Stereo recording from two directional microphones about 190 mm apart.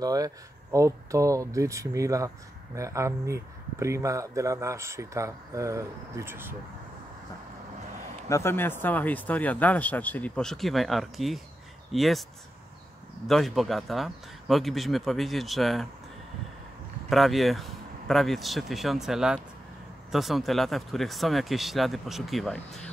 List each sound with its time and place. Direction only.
0.0 s speech: 20° right (ahead or behind)
8.3 s speech: 15° left (ahead or behind)
13.3 s speech: centre (ahead or behind)
17.1 s speech: centre (ahead or behind)